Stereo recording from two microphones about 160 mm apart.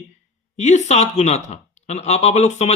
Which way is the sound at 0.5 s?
45° left (ahead or behind).